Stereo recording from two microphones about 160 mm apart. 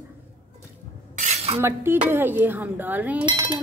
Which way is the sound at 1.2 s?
45° right (ahead or behind).